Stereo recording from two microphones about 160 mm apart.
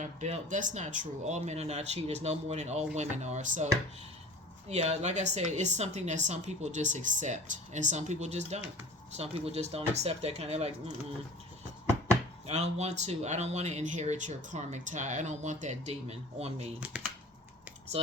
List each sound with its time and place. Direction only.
0.0 s speech: 50° right (ahead or behind)
4.7 s speech: 45° right (ahead or behind)
12.5 s speech: 45° right (ahead or behind)
17.9 s speech: 40° right (ahead or behind)